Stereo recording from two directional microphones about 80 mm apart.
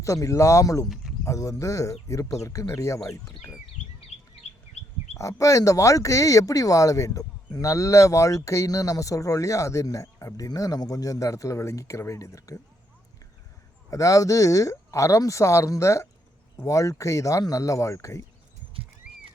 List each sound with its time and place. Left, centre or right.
0.0 s speech: left
5.1 s speech: left
13.9 s speech: left